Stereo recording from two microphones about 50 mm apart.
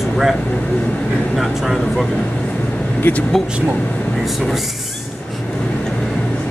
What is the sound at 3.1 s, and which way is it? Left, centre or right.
Speech, left.